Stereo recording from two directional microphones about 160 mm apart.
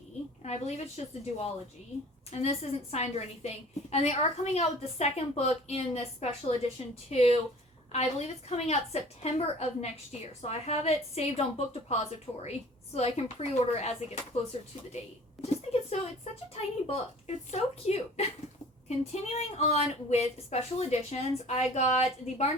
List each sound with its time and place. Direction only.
0.4 s a woman's voice: 40° left (ahead or behind)
14.9 s music: 40° left (ahead or behind)
16.8 s a woman's voice: 40° left (ahead or behind)